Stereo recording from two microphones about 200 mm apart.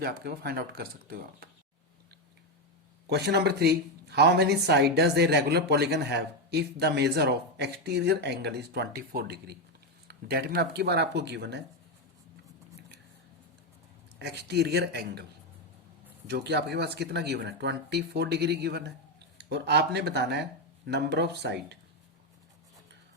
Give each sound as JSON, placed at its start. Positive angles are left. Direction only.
{"t": 0.0, "sound": "speech", "side_deg": -50}
{"t": 3.1, "sound": "speech", "side_deg": -55}
{"t": 14.2, "sound": "speech", "side_deg": -55}